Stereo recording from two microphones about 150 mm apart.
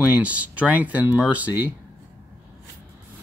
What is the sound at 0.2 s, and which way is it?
Speech, 10° right (ahead or behind).